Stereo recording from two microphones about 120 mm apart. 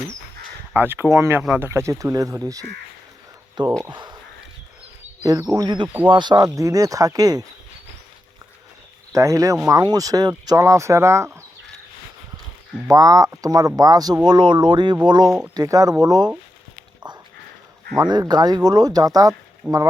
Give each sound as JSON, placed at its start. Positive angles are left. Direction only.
{"t": 0.7, "sound": "speech", "side_deg": -15}
{"t": 3.8, "sound": "speech", "side_deg": -35}
{"t": 5.2, "sound": "speech", "side_deg": -30}
{"t": 9.1, "sound": "speech", "side_deg": -25}
{"t": 12.9, "sound": "speech", "side_deg": -30}
{"t": 18.1, "sound": "speech", "side_deg": -35}
{"t": 19.6, "sound": "speech", "side_deg": -5}